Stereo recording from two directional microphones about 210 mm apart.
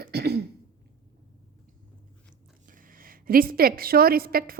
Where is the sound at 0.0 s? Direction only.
50° right (ahead or behind).